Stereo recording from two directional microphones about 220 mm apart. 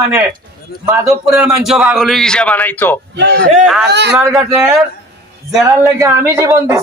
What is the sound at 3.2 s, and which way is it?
Speech, 50° right (ahead or behind).